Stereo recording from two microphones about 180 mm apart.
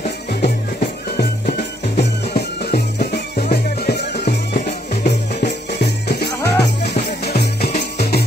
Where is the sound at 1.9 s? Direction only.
65° left (ahead or behind).